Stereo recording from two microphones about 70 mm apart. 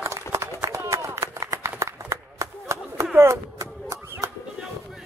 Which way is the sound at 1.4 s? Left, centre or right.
Right.